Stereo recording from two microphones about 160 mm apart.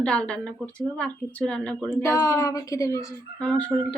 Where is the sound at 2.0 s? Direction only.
20° left (ahead or behind).